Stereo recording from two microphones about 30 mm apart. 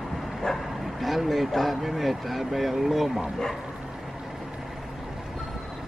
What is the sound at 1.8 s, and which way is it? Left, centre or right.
Speech, centre.